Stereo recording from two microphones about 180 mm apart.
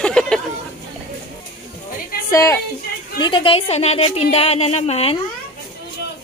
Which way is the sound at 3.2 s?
25° left (ahead or behind).